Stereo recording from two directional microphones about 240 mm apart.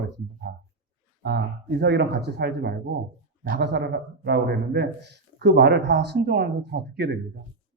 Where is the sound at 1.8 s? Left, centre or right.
Right.